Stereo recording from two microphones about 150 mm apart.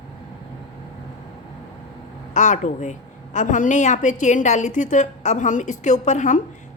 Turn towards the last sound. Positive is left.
turn(degrees=55)  # may be behind; listen again after turning